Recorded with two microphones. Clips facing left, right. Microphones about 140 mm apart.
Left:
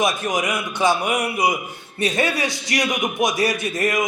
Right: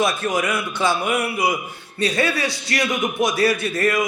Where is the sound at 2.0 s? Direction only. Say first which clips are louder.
Even; 20° left (ahead or behind).